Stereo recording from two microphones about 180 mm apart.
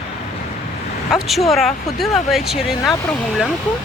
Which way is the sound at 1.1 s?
Centre (ahead or behind).